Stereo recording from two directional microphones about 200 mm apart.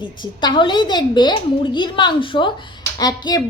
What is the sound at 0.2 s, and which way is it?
A woman's voice, 25° left (ahead or behind).